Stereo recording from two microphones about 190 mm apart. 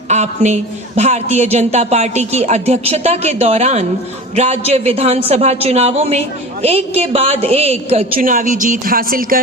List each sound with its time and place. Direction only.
0.1 s speech: 35° right (ahead or behind)
8.1 s speech: 45° right (ahead or behind)